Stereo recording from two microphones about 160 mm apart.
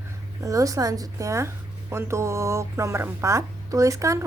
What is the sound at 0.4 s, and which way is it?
A woman's voice, 20° right (ahead or behind).